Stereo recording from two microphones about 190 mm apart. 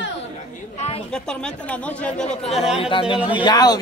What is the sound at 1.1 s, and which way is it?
Speech, 5° left (ahead or behind).